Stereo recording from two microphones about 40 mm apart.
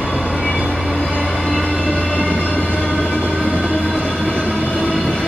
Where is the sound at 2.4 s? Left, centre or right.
Left.